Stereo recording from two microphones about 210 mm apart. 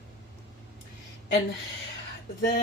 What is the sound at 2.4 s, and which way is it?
Speech, 50° left (ahead or behind).